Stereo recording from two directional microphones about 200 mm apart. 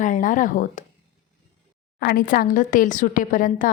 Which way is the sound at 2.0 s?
45° left (ahead or behind).